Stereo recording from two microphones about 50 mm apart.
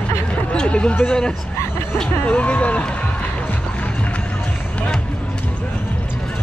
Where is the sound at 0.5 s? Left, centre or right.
Left.